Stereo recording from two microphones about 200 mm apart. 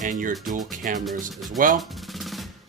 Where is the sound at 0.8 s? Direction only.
40° right (ahead or behind).